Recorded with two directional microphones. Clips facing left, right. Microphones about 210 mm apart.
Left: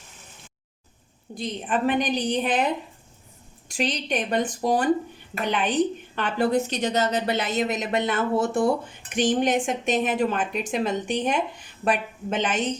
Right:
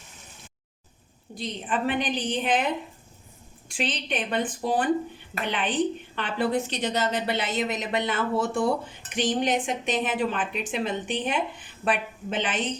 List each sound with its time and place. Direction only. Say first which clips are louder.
1.4 s a woman's voice: left 3 dB; 45° left (ahead or behind)
3.7 s a woman's voice: left 3 dB; 40° left (ahead or behind)